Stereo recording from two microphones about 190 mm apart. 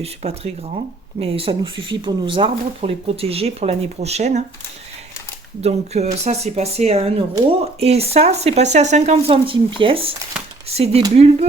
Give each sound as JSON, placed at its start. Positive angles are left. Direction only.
{"t": 0.0, "sound": "speech", "side_deg": -35}
{"t": 5.6, "sound": "speech", "side_deg": -35}